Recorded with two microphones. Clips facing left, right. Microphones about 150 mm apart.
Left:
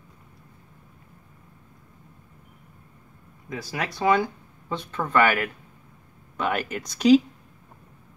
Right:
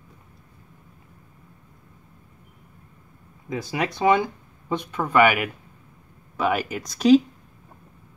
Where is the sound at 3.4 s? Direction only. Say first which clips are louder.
Right 4 dB; 20° right (ahead or behind); by 7.1 s centre (ahead or behind).